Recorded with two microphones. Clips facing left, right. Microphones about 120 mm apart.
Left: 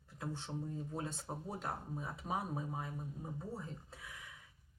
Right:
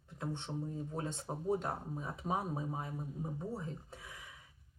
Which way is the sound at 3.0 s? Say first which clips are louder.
Right 4 dB; 15° right (ahead or behind).